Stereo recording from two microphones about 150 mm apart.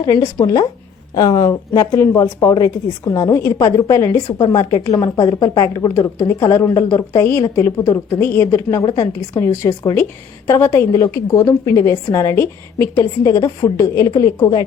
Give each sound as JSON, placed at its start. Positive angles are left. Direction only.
{"t": 0.0, "sound": "a woman's voice", "side_deg": 25}
{"t": 8.9, "sound": "a woman's voice", "side_deg": 30}
{"t": 9.8, "sound": "speech", "side_deg": 20}